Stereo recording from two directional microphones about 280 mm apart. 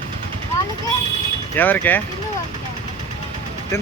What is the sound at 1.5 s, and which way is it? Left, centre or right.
Speech, centre.